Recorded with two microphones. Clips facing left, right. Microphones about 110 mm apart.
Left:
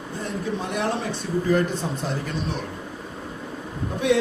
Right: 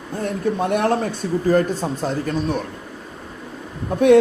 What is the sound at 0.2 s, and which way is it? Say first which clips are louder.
A man's voice: right 7 dB; 55° right (ahead or behind).